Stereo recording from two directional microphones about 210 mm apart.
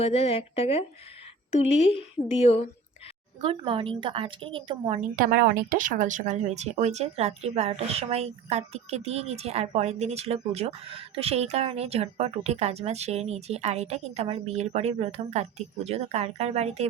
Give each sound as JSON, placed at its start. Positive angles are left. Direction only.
{"t": 0.0, "sound": "speech", "side_deg": 30}
{"t": 3.4, "sound": "a woman's voice", "side_deg": -25}
{"t": 5.1, "sound": "speech", "side_deg": -45}